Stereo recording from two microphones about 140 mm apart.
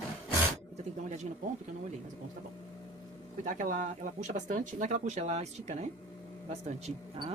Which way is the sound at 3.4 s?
70° right (ahead or behind).